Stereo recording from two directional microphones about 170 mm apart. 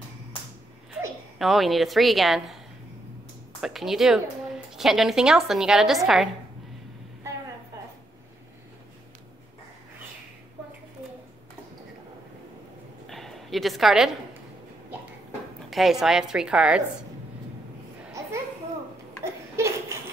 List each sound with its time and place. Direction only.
1.4 s a woman's voice: centre (ahead or behind)
3.6 s a woman's voice: centre (ahead or behind)
13.1 s a sound: centre (ahead or behind)
15.7 s a woman's voice: centre (ahead or behind)
19.5 s laughter: 15° right (ahead or behind)